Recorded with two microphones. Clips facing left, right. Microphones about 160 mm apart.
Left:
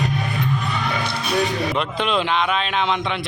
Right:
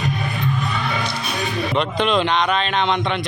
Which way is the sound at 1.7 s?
Centre (ahead or behind).